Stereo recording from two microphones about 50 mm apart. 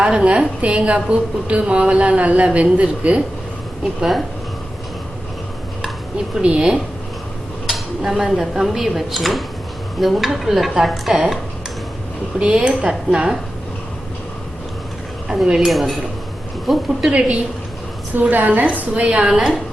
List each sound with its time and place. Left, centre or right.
0.0 s speech: centre
6.4 s speech: centre
12.4 s a woman's voice: right
15.4 s a woman's voice: centre
15.7 s a woman's voice: centre
17.1 s a woman's voice: right
18.9 s a woman's voice: right